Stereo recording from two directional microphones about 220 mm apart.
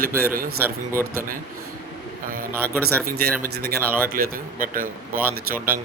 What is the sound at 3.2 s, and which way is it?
Speech, 45° right (ahead or behind).